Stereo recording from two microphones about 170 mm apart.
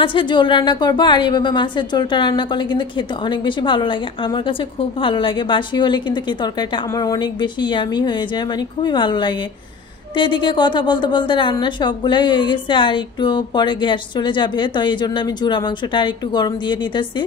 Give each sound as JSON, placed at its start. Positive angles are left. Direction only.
{"t": 0.0, "sound": "a woman's voice", "side_deg": 30}
{"t": 5.0, "sound": "a woman's voice", "side_deg": 30}
{"t": 7.6, "sound": "a woman's voice", "side_deg": 25}